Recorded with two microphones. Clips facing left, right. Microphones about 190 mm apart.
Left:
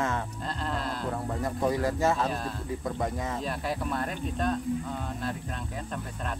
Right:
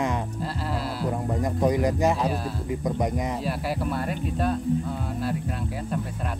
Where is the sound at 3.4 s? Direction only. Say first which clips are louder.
Right 4 dB; 5° right (ahead or behind).